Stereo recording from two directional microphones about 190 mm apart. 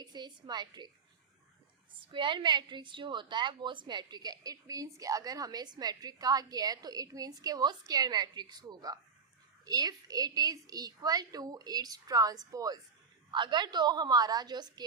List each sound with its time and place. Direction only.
0.0 s a woman's voice: 20° right (ahead or behind)
2.1 s a woman's voice: 25° right (ahead or behind)